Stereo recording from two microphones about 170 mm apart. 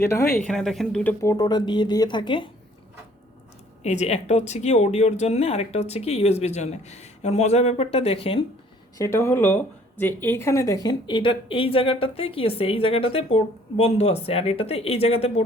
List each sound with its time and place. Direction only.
0.0 s speech: 15° left (ahead or behind)
0.4 s a woman's voice: 5° left (ahead or behind)
1.2 s speech: 20° left (ahead or behind)
3.8 s a woman's voice: 40° left (ahead or behind)
9.0 s a woman's voice: 15° left (ahead or behind); by 15.4 s 35° left (ahead or behind)